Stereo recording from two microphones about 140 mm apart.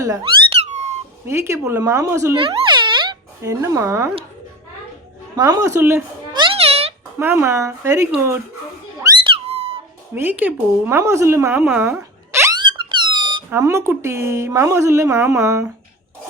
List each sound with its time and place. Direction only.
0.0 s speech: 25° right (ahead or behind)
0.6 s squeak: 50° right (ahead or behind)
1.3 s speech: 20° right (ahead or behind)
2.4 s music: 35° right (ahead or behind)
3.4 s speech: 20° right (ahead or behind)
5.4 s speech: 25° right (ahead or behind)
6.3 s music: 40° right (ahead or behind)
7.2 s speech: 20° right (ahead or behind)
9.2 s a sound: 45° right (ahead or behind)
10.2 s speech: 15° right (ahead or behind)
12.8 s squeak: 35° right (ahead or behind)
13.5 s speech: 20° right (ahead or behind)